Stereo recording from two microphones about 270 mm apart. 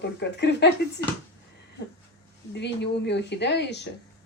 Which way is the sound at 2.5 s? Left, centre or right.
Left.